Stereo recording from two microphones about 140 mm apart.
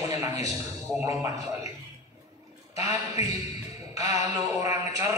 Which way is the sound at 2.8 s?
25° right (ahead or behind).